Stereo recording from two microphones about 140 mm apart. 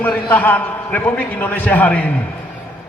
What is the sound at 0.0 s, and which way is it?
A man's voice, 10° left (ahead or behind).